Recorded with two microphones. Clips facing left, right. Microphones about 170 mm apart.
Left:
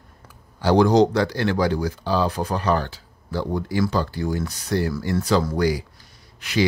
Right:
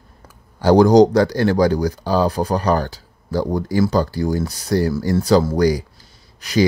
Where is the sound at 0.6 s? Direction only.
40° right (ahead or behind).